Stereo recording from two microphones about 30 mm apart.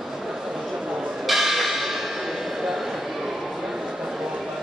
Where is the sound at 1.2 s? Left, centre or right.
Centre.